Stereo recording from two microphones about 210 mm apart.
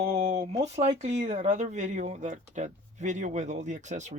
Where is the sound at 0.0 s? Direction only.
30° right (ahead or behind).